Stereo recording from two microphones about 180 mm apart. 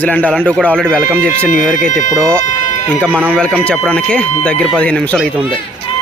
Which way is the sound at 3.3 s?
5° left (ahead or behind).